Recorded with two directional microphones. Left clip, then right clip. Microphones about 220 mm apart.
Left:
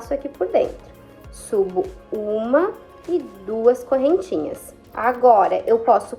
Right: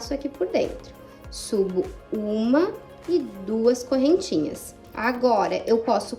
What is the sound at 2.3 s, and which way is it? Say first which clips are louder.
A woman's voice: left 4 dB; 25° right (ahead or behind).